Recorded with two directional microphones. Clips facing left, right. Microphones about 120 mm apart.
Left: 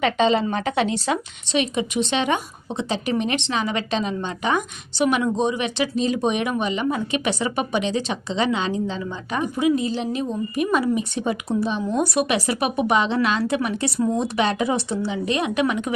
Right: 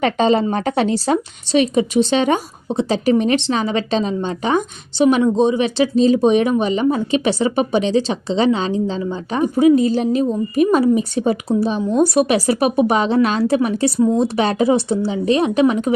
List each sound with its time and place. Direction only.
0.0 s a woman's voice: 40° right (ahead or behind)